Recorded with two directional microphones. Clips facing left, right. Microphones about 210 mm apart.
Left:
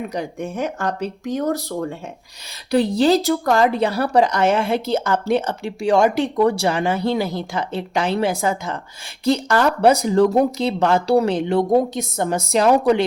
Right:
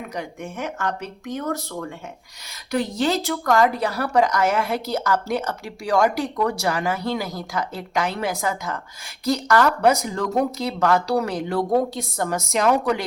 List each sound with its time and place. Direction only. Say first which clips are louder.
0.1 s speech: left 5 dB; 35° left (ahead or behind)